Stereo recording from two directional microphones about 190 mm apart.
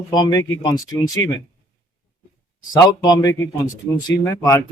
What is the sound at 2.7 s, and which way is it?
A man's voice, 20° left (ahead or behind).